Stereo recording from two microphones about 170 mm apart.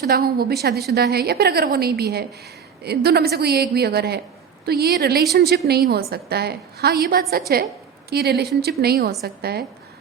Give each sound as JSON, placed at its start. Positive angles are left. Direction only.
{"t": 0.1, "sound": "a woman's voice", "side_deg": -65}
{"t": 8.1, "sound": "a woman's voice", "side_deg": -70}